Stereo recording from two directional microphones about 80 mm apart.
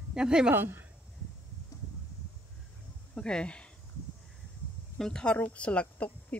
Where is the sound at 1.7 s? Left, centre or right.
Left.